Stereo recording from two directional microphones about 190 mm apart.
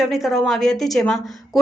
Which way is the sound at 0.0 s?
Centre (ahead or behind).